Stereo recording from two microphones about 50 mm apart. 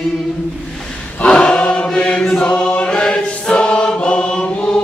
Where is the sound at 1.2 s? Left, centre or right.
Left.